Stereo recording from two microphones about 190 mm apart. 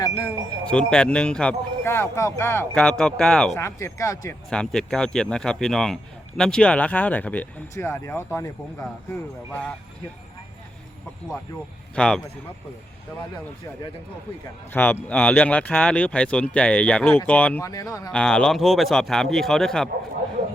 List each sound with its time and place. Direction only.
0.7 s speech: 5° left (ahead or behind)
3.6 s speech: 15° left (ahead or behind)
4.4 s speech: 5° left (ahead or behind)
11.9 s speech: 5° left (ahead or behind)
14.7 s speech: 10° left (ahead or behind)
18.1 s speech: 5° left (ahead or behind)